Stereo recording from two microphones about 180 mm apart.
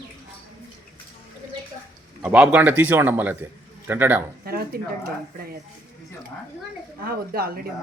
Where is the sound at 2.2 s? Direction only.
5° right (ahead or behind).